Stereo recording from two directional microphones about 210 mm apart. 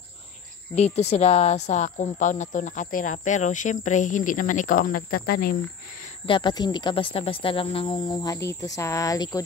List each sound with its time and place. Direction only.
0.7 s speech: 30° left (ahead or behind); by 5.6 s 45° left (ahead or behind)
6.2 s speech: 20° left (ahead or behind)